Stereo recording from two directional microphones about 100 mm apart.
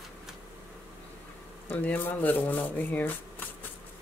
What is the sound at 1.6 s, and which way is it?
Speech, 15° left (ahead or behind).